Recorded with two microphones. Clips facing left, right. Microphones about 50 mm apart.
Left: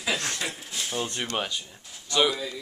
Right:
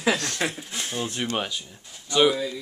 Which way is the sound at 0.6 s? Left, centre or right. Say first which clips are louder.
Right 1 dB; centre.